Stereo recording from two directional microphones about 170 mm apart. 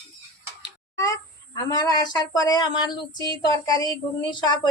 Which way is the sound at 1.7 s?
25° left (ahead or behind).